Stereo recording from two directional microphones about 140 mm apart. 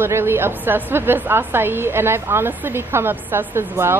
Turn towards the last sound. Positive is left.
turn(degrees=-15)  # may be behind; listen again after turning